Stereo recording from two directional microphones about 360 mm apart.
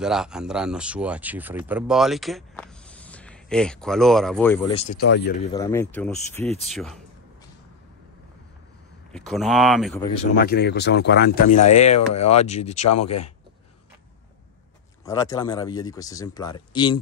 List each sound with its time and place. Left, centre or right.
0.0 s speech: centre
4.7 s speech: left
5.5 s speech: centre
9.1 s speech: centre
10.4 s speech: left
12.9 s speech: left
15.0 s speech: centre